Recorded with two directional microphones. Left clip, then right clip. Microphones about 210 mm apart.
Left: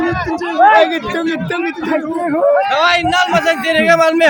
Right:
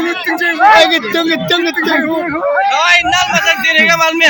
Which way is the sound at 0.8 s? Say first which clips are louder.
Right 4 dB; 40° right (ahead or behind).